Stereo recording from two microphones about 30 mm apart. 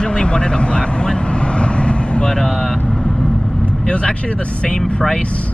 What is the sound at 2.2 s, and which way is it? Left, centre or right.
Speech, centre.